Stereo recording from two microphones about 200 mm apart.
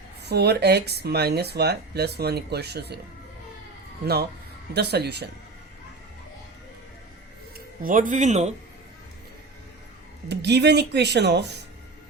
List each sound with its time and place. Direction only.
0.3 s speech: 55° right (ahead or behind)
4.0 s speech: 55° right (ahead or behind)
7.8 s speech: 40° right (ahead or behind)
10.2 s speech: 60° right (ahead or behind)